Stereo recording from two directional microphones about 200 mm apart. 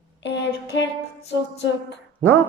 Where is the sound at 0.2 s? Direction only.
60° left (ahead or behind).